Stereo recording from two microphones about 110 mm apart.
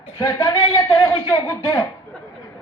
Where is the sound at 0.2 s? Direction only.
35° left (ahead or behind).